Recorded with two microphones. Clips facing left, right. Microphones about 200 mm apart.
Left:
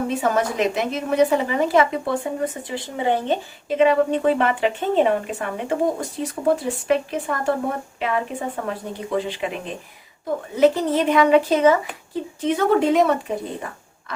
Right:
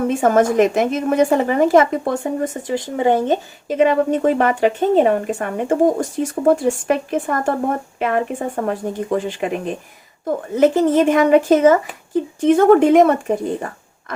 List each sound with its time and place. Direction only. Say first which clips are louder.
0.1 s speech: right 6 dB; 50° right (ahead or behind)